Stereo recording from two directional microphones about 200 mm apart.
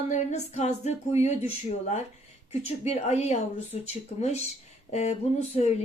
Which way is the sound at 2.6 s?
35° left (ahead or behind).